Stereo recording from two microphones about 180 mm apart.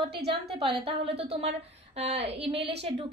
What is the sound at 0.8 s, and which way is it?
A woman's voice, 35° right (ahead or behind).